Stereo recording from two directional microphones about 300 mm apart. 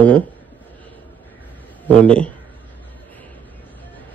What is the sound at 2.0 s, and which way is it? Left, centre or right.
Speech, centre.